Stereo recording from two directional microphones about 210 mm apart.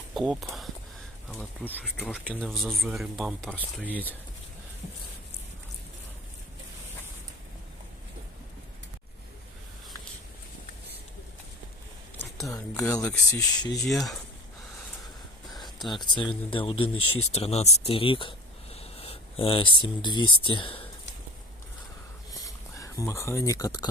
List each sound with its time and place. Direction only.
0.1 s speech: centre (ahead or behind)
12.2 s a sound: 15° left (ahead or behind)
13.0 s speech: 10° left (ahead or behind)
13.6 s speech: 20° left (ahead or behind)
15.4 s whispering: centre (ahead or behind)
15.9 s speech: 20° left (ahead or behind)
17.0 s speech: 90° left
17.3 s a sound: 30° left (ahead or behind)
19.8 s speech: 20° left (ahead or behind)
22.4 s speech: 15° left (ahead or behind)